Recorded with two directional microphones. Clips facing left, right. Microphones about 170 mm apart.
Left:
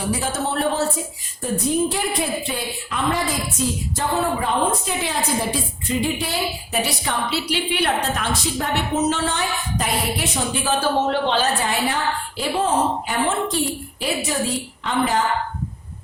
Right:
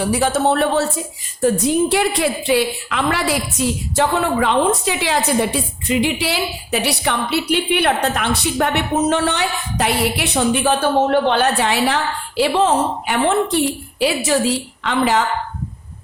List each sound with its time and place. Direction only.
0.1 s a woman's voice: 70° right (ahead or behind)
14.0 s a woman's voice: 90° right